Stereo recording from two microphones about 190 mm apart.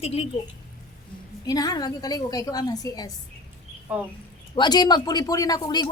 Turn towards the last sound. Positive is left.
turn(degrees=20)  # may be behind; listen again after turning